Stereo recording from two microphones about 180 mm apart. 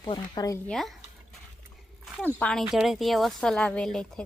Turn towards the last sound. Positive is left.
turn(degrees=5)  # may be behind; listen again after turning